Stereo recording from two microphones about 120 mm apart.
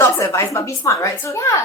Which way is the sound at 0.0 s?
25° left (ahead or behind).